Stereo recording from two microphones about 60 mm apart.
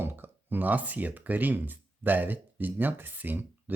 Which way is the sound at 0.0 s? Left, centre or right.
Right.